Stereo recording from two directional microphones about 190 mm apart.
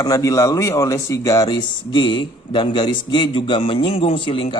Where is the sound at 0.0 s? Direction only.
20° left (ahead or behind).